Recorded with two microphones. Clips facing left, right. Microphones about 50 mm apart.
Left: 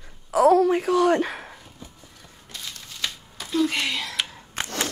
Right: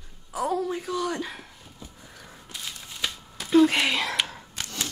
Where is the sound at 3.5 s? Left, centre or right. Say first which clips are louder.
Right 5 dB; right.